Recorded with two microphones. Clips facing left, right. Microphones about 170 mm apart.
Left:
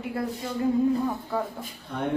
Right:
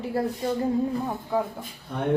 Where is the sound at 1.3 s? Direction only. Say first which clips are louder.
Right 5 dB; 15° right (ahead or behind).